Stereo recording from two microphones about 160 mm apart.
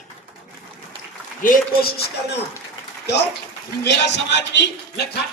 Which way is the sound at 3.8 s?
90° left.